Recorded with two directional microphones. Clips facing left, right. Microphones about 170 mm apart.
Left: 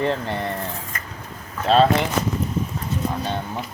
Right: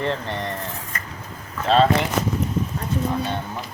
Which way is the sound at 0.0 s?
10° left (ahead or behind).